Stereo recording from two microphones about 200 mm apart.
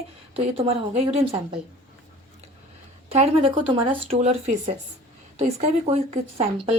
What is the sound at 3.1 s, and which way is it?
A woman's voice, 30° right (ahead or behind).